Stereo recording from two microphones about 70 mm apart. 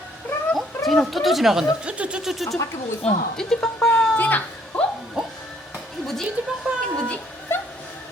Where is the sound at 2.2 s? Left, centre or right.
Centre.